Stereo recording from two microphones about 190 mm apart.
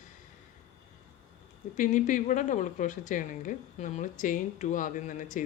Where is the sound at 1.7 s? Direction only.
40° left (ahead or behind).